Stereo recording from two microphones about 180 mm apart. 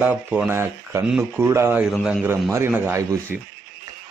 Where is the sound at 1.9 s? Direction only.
Centre (ahead or behind).